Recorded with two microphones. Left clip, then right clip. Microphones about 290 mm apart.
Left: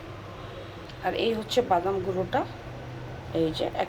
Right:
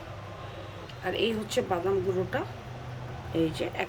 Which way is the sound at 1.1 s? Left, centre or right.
Right.